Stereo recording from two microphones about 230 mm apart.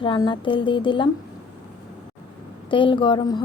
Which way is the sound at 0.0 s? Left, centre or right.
Left.